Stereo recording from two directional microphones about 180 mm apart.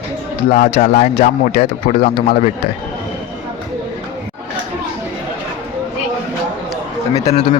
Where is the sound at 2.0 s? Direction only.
30° left (ahead or behind).